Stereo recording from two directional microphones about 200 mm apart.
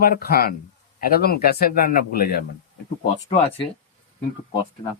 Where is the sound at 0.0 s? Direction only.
50° left (ahead or behind).